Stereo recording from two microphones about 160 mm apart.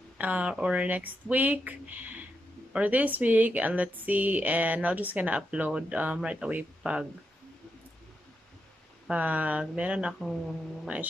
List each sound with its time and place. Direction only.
0.2 s speech: 10° right (ahead or behind)
9.0 s speech: 10° right (ahead or behind)